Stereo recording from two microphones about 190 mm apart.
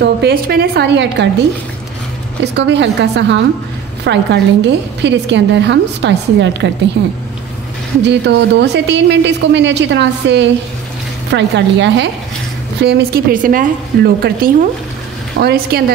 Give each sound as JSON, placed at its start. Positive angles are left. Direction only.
{"t": 0.0, "sound": "speech", "side_deg": -55}
{"t": 2.5, "sound": "a woman's voice", "side_deg": -70}
{"t": 12.8, "sound": "a woman's voice", "side_deg": -55}